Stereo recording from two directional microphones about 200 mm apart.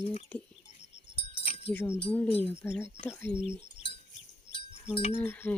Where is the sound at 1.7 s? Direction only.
10° left (ahead or behind).